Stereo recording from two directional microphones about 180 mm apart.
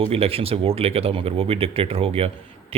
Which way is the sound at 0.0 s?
30° right (ahead or behind).